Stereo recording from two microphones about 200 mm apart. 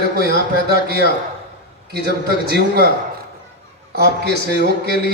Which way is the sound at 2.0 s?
55° right (ahead or behind).